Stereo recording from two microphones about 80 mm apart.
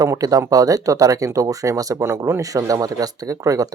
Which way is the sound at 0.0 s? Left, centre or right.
Right.